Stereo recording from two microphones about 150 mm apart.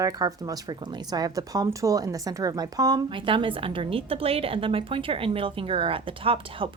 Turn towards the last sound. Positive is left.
turn(degrees=-35)  # may be behind; listen again after turning